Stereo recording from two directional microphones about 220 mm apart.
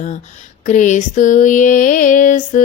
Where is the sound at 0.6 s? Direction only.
35° left (ahead or behind).